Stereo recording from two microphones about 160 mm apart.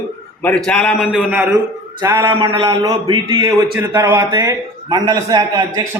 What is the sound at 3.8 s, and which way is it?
A man's voice, 15° right (ahead or behind).